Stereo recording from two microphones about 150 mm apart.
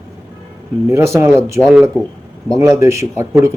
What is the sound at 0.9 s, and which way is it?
Speech, 20° right (ahead or behind).